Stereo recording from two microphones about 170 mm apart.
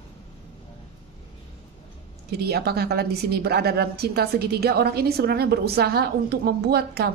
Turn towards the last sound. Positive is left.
turn(degrees=-70)  # may be behind; listen again after turning